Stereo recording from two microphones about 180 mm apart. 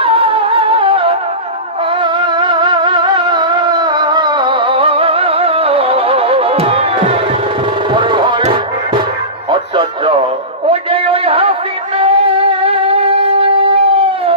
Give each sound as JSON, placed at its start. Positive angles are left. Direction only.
{"t": 0.0, "sound": "music", "side_deg": -30}
{"t": 10.7, "sound": "a sound", "side_deg": -30}
{"t": 11.9, "sound": "shofar", "side_deg": -30}